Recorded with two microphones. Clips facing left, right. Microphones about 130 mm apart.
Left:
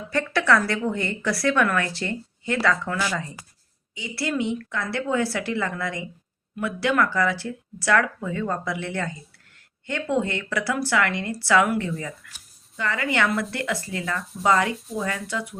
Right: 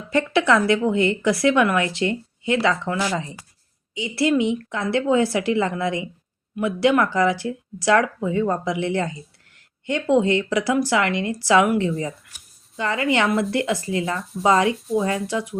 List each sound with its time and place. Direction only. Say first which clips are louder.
0.1 s speech: right 3 dB; 20° right (ahead or behind)